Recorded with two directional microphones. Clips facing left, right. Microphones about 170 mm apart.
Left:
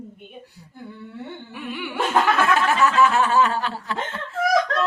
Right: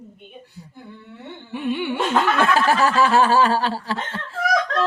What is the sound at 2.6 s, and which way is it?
Snicker, 35° right (ahead or behind).